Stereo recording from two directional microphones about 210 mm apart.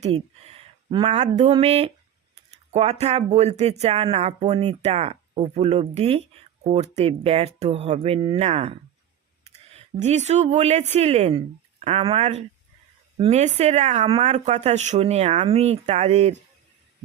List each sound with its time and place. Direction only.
0.0 s speech: 30° right (ahead or behind)